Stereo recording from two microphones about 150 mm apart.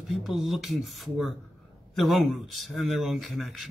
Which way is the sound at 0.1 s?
Centre (ahead or behind).